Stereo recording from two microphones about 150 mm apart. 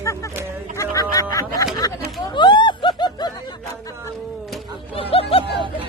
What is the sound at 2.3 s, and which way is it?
Snicker, 30° left (ahead or behind).